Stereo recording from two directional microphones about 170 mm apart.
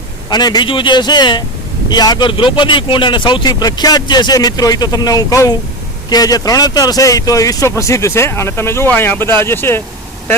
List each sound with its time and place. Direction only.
0.3 s speech: 25° left (ahead or behind)